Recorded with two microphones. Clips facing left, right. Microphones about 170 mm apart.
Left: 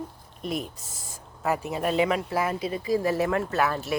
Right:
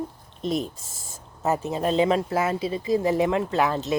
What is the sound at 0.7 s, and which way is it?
Spray, 25° right (ahead or behind).